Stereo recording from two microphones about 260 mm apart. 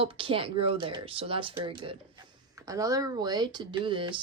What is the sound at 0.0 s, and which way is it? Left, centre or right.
Speech, right.